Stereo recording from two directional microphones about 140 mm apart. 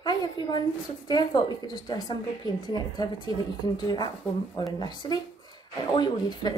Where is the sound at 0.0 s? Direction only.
30° left (ahead or behind).